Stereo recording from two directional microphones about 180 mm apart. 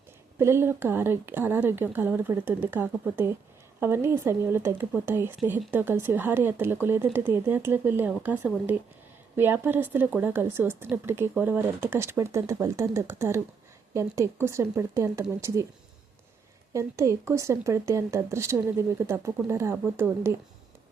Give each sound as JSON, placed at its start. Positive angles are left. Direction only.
{"t": 0.3, "sound": "speech", "side_deg": -15}
{"t": 16.7, "sound": "speech", "side_deg": -15}